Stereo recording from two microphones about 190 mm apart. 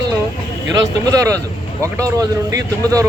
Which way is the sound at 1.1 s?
15° right (ahead or behind).